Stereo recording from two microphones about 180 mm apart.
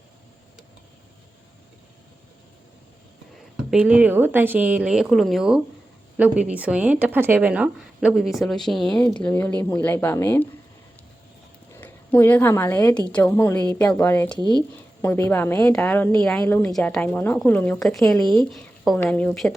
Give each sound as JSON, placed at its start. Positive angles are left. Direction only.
{"t": 3.7, "sound": "a woman's voice", "side_deg": -5}
{"t": 11.8, "sound": "a woman's voice", "side_deg": 10}
{"t": 14.3, "sound": "speech", "side_deg": -25}
{"t": 15.0, "sound": "a woman's voice", "side_deg": 10}
{"t": 18.5, "sound": "a sound", "side_deg": 0}
{"t": 19.0, "sound": "speech", "side_deg": 5}